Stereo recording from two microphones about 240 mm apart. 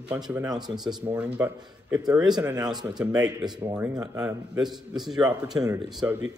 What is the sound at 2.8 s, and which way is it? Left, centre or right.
Speech, centre.